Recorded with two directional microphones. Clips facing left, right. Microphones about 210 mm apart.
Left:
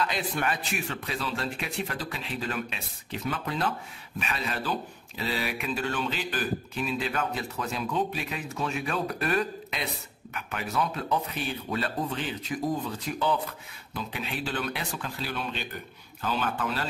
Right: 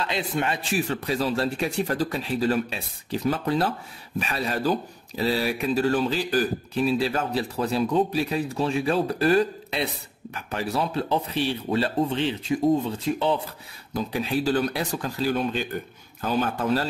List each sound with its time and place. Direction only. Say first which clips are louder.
0.0 s speech: right 3 dB; 25° right (ahead or behind)
13.9 s speech: right 9 dB; 40° right (ahead or behind)